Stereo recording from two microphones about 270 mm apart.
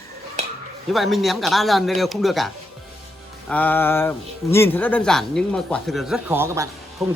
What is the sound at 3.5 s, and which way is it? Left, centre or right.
Speech, centre.